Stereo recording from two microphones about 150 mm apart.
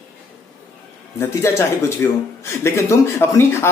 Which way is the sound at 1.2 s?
20° left (ahead or behind).